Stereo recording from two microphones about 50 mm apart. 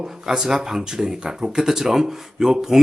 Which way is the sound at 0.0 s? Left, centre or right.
Centre.